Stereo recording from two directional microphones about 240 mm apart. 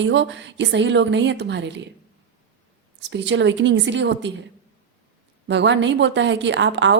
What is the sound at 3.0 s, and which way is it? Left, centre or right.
A woman's voice, right.